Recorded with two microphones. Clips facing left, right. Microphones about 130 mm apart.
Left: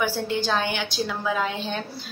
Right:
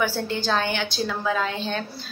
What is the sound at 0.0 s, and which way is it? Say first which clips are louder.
A woman's voice: even; 15° left (ahead or behind).